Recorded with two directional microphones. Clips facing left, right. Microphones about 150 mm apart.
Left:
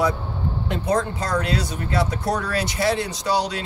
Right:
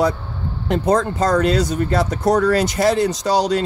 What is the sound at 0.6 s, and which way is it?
Speech, 45° right (ahead or behind).